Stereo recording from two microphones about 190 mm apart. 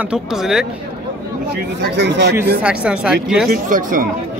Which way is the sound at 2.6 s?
5° right (ahead or behind).